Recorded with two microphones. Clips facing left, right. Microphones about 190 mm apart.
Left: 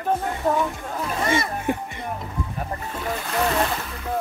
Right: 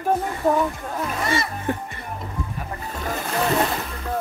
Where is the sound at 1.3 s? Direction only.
15° left (ahead or behind).